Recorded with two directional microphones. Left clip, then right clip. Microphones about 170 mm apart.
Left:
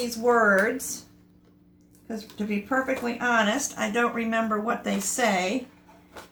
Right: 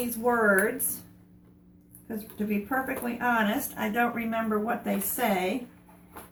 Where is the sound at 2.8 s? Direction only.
35° left (ahead or behind).